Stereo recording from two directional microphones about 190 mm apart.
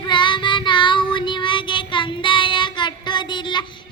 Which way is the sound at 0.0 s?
25° left (ahead or behind).